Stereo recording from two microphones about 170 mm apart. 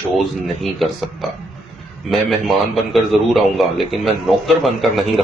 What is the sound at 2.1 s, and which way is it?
A man's voice, centre (ahead or behind).